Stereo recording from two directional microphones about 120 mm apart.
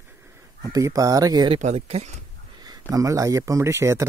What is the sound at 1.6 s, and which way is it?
Speech, 65° right (ahead or behind).